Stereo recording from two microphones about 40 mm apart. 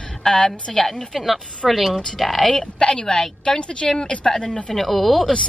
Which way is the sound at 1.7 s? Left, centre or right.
Centre.